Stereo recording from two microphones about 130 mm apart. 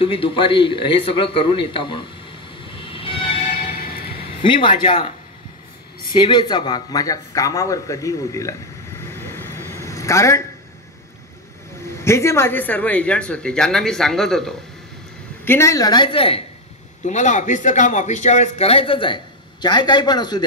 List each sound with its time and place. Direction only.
0.0 s a man's voice: 45° left (ahead or behind)
2.8 s train: 45° left (ahead or behind)
4.2 s a man's voice: 40° left (ahead or behind); by 8.5 s 25° left (ahead or behind)
9.0 s a sound: 20° left (ahead or behind)
11.9 s speech: 20° left (ahead or behind); by 14.5 s 5° left (ahead or behind)
15.4 s speech: 20° left (ahead or behind); by 16.4 s 45° left (ahead or behind)
17.0 s a man's voice: 70° left (ahead or behind); by 20.4 s 35° left (ahead or behind)